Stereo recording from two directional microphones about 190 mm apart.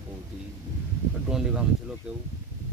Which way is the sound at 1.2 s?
5° right (ahead or behind).